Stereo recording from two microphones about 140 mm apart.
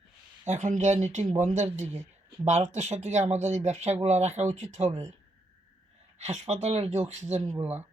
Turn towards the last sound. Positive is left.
turn(degrees=-15)  # may be behind; listen again after turning